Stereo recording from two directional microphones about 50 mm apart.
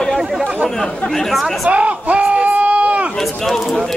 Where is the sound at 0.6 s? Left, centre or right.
Centre.